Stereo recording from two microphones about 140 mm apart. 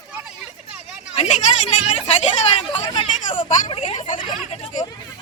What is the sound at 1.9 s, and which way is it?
A woman's voice, 50° left (ahead or behind).